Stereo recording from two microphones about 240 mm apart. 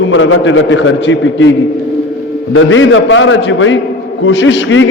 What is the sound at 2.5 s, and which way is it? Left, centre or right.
A man's voice, left.